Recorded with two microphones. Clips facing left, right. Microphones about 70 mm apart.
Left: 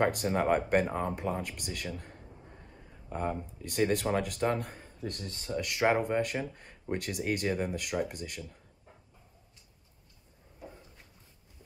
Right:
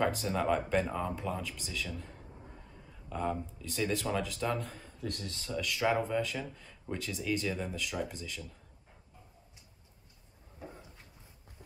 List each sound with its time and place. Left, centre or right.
0.0 s speech: left
3.1 s speech: left
5.2 s speech: left
5.6 s speech: left